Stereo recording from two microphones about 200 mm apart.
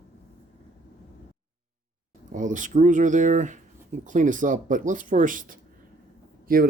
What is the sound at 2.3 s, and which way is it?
Speech, 40° right (ahead or behind).